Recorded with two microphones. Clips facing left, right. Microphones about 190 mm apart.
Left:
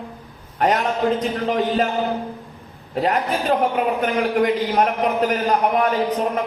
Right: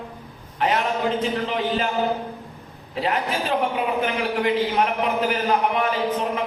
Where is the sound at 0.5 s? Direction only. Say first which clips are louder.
Left 3 dB; 45° left (ahead or behind).